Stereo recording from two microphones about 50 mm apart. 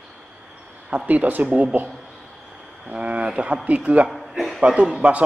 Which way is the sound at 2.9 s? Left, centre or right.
Right.